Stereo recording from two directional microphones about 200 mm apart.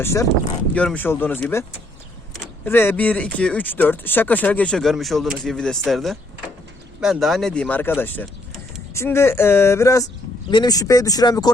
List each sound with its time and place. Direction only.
0.0 s speech: 15° left (ahead or behind)
2.6 s speech: 10° left (ahead or behind)